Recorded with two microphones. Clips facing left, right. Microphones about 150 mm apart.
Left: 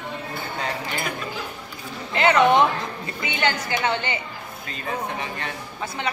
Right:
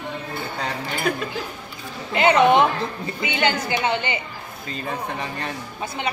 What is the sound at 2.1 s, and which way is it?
A woman's voice, 20° right (ahead or behind).